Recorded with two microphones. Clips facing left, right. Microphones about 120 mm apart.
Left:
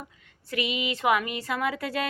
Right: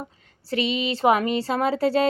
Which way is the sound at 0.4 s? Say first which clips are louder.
Right 5 dB; 30° right (ahead or behind).